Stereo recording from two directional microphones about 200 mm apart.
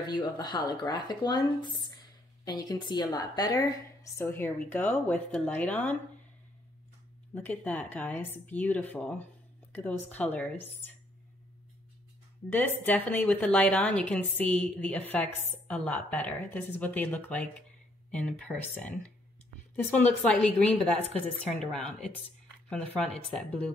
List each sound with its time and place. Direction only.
0.1 s a woman's voice: 20° left (ahead or behind)
7.3 s a woman's voice: 10° left (ahead or behind)
12.4 s a woman's voice: 10° left (ahead or behind)
23.3 s speech: 5° left (ahead or behind)